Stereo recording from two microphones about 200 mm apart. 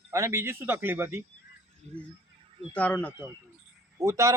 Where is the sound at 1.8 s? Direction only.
30° right (ahead or behind).